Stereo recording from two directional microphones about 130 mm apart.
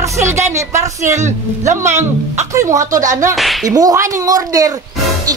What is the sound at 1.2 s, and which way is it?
Speech, 70° right (ahead or behind).